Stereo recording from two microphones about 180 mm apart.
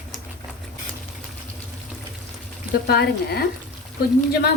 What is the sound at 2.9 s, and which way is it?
Speech, 60° left (ahead or behind).